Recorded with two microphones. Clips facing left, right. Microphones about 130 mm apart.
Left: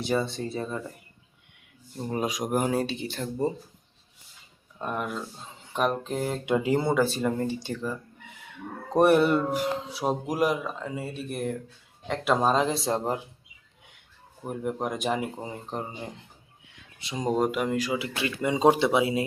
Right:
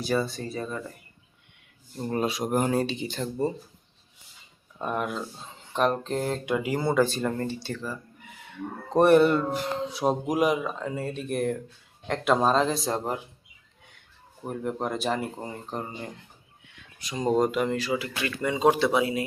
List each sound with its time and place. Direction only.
0.0 s speech: 25° left (ahead or behind)
2.0 s speech: 10° left (ahead or behind)
4.8 s speech: centre (ahead or behind)
6.4 s speech: 25° left (ahead or behind)
6.9 s speech: 10° left (ahead or behind)
12.7 s speech: 25° left (ahead or behind)
14.4 s speech: 10° left (ahead or behind)
17.2 s speech: 5° left (ahead or behind)